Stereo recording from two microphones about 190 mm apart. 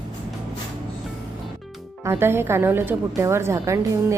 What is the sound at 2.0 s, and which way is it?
Speech, 10° right (ahead or behind).